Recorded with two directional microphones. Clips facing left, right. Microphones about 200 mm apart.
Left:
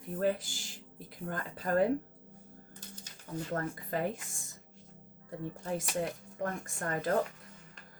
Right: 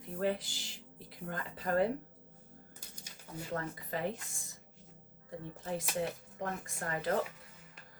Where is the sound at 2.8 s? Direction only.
10° right (ahead or behind).